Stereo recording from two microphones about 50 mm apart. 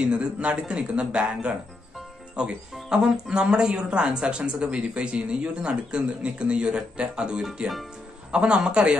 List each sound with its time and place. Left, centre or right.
0.0 s speech: right
2.7 s a man's voice: centre